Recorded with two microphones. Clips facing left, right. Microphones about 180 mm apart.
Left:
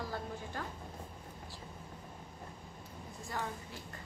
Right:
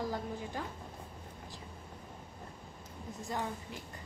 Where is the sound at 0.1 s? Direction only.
15° right (ahead or behind).